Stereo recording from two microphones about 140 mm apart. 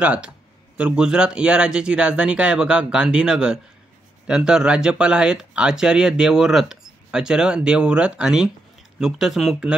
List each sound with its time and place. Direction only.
0.0 s speech: 10° right (ahead or behind)